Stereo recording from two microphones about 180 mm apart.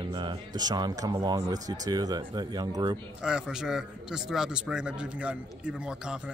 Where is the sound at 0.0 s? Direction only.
25° right (ahead or behind).